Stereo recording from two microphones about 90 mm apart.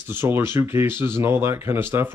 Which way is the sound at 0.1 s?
25° right (ahead or behind).